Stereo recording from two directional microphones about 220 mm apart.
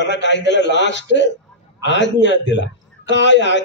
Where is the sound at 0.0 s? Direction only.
55° left (ahead or behind).